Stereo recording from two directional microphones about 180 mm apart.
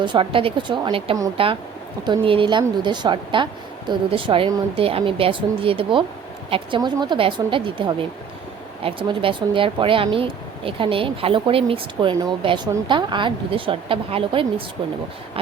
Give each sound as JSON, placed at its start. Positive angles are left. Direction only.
{"t": 0.0, "sound": "speech", "side_deg": -25}